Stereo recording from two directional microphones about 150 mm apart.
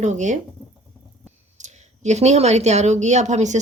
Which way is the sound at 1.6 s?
50° right (ahead or behind).